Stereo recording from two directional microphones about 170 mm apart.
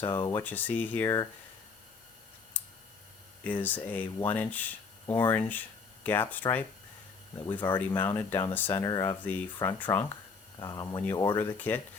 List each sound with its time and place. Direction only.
0.1 s speech: 20° left (ahead or behind)
0.4 s speech: 10° left (ahead or behind)
3.4 s speech: 10° left (ahead or behind)
7.8 s speech: 10° left (ahead or behind)
9.2 s speech: 10° left (ahead or behind)
10.6 s speech: 20° left (ahead or behind)